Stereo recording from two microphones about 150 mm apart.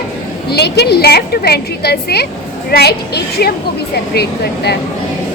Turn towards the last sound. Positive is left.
turn(degrees=90)